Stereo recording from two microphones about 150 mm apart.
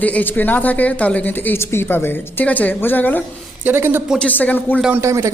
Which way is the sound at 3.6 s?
15° right (ahead or behind).